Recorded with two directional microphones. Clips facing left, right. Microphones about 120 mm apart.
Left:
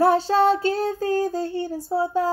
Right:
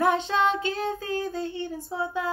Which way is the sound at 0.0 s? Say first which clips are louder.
Left 5 dB; 35° left (ahead or behind).